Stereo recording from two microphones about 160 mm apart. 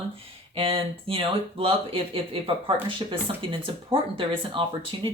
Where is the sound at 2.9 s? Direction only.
35° right (ahead or behind).